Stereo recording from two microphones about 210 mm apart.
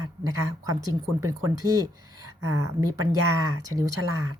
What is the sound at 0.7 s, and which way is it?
A woman's voice, 15° right (ahead or behind).